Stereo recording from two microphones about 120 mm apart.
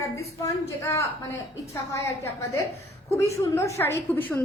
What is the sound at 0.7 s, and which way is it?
A woman's voice, 25° left (ahead or behind).